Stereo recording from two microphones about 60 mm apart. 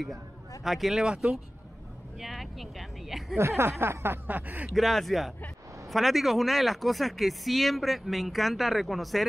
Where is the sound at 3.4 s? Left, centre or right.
Right.